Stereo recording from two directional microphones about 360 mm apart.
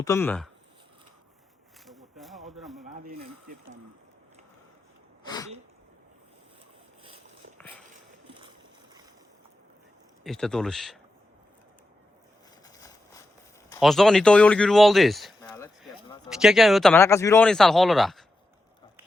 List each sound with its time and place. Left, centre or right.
0.0 s speech: centre
1.9 s a sound: centre
2.9 s speech: right
5.2 s sneeze: centre
8.3 s boat: centre
10.2 s speech: centre
12.6 s a sound: centre
16.3 s speech: centre